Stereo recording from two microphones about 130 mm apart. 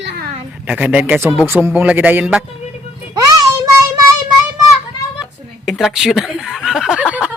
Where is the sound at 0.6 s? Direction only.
10° right (ahead or behind).